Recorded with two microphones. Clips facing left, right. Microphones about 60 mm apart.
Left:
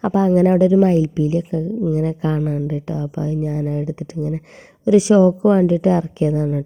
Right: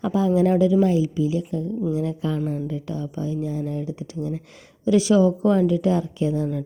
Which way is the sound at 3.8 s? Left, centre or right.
Left.